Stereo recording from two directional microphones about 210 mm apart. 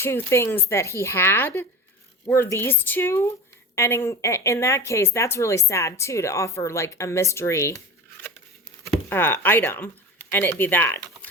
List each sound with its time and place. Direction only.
0.0 s a woman's voice: 10° left (ahead or behind)
8.9 s a woman's voice: 10° left (ahead or behind)